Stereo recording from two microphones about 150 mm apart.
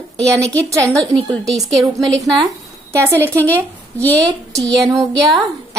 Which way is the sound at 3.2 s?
10° left (ahead or behind).